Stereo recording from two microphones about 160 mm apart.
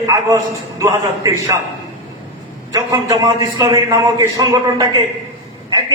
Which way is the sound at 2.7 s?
20° right (ahead or behind).